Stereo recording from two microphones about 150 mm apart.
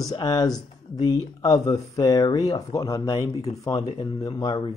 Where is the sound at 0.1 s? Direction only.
25° left (ahead or behind).